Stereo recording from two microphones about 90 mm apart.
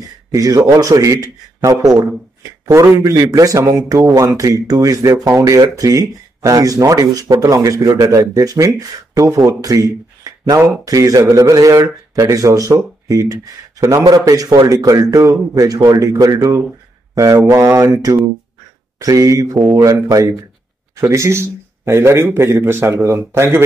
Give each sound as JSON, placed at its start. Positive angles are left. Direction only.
{"t": 0.3, "sound": "a man's voice", "side_deg": -40}